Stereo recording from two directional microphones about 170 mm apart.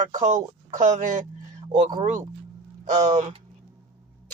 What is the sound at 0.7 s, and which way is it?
Speech, 45° right (ahead or behind).